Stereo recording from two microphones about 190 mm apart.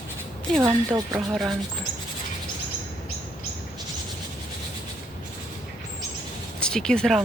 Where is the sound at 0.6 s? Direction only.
15° right (ahead or behind).